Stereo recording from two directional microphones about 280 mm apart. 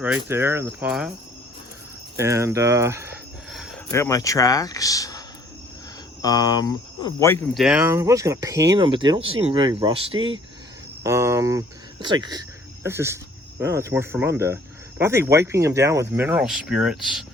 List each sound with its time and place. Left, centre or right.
0.3 s speech: centre
2.1 s speech: centre
3.5 s a sound: centre
3.9 s speech: centre
6.2 s speech: centre
7.5 s speech: centre